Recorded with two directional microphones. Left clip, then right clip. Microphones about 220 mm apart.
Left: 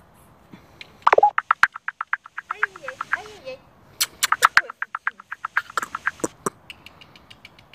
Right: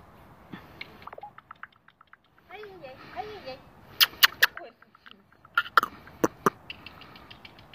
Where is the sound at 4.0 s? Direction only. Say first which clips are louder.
Left 1 dB; centre (ahead or behind).